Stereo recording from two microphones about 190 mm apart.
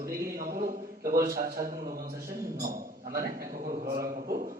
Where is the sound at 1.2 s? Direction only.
50° right (ahead or behind).